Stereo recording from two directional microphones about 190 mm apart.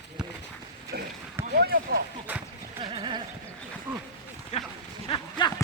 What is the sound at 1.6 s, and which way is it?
Speech, 55° right (ahead or behind).